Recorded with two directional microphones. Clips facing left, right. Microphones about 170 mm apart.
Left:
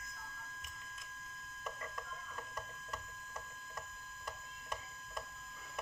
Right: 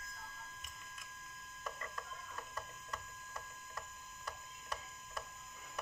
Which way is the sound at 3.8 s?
20° left (ahead or behind).